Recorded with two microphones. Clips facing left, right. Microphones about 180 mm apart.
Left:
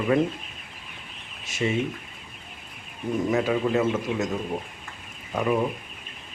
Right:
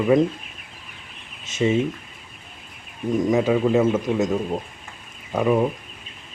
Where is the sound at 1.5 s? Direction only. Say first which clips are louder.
Right 6 dB; 20° right (ahead or behind).